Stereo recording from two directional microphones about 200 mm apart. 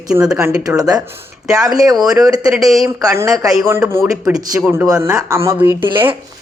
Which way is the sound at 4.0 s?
5° right (ahead or behind).